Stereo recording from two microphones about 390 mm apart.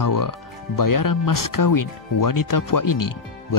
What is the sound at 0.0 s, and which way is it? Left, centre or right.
Speech, left.